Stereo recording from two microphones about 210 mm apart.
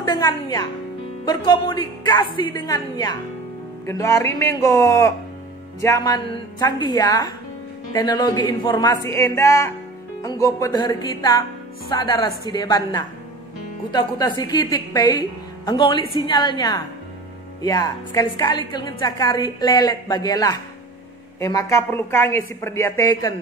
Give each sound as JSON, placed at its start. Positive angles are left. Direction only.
{"t": 0.0, "sound": "a woman's voice", "side_deg": 20}